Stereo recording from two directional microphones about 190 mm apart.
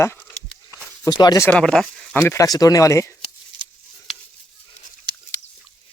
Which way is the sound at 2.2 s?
15° left (ahead or behind).